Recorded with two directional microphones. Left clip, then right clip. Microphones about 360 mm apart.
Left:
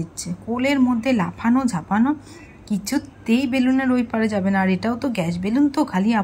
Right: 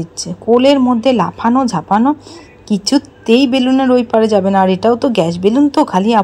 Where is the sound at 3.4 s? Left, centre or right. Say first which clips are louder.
Right 8 dB; right.